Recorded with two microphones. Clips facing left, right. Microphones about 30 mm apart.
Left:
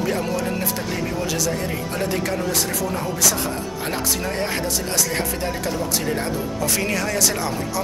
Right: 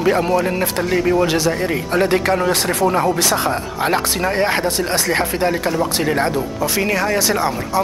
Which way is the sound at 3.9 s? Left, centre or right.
Right.